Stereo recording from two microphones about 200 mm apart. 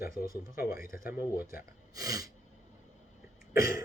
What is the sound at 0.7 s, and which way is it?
Speech, 45° left (ahead or behind).